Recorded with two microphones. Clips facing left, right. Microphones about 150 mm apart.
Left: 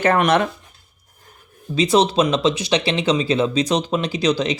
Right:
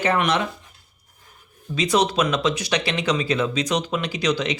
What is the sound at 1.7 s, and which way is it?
Speech, 30° left (ahead or behind).